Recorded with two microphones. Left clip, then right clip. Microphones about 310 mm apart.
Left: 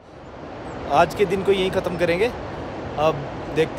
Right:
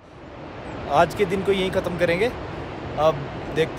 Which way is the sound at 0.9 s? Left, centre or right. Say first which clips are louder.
Left 1 dB; centre.